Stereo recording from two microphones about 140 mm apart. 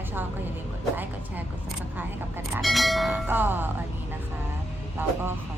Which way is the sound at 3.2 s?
15° right (ahead or behind).